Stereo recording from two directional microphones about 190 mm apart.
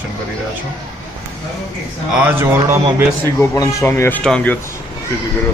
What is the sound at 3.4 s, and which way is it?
Speech, 15° left (ahead or behind).